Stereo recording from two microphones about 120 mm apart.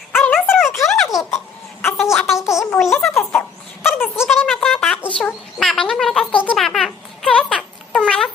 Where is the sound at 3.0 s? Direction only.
10° left (ahead or behind).